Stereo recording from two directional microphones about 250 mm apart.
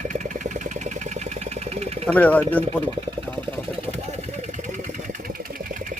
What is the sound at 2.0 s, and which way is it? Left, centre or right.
Speech, centre.